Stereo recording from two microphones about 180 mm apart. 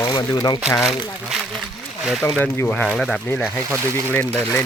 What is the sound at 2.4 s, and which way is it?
Speech, 10° left (ahead or behind).